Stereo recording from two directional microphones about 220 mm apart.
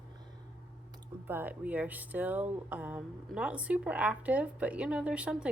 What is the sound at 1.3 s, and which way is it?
Speech, 10° right (ahead or behind).